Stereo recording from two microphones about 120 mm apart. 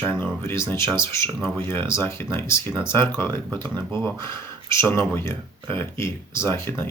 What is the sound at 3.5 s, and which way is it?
Speech, 35° right (ahead or behind).